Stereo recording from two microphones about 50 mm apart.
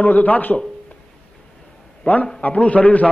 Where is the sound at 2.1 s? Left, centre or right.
Left.